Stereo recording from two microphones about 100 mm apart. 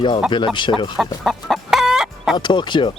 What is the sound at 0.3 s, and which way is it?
Speech, 55° left (ahead or behind).